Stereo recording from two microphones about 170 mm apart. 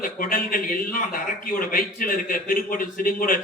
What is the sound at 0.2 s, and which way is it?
A man's voice, 55° left (ahead or behind).